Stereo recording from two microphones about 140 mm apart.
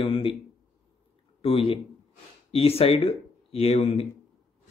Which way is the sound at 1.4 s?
40° left (ahead or behind).